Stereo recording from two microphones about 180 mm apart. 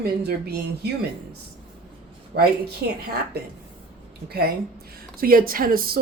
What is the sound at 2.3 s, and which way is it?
Speech, 65° right (ahead or behind).